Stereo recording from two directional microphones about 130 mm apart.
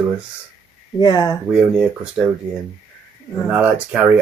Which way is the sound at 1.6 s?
5° right (ahead or behind).